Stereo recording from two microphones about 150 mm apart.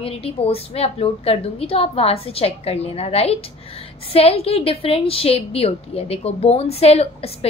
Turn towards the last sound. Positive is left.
turn(degrees=45)  # may be behind; listen again after turning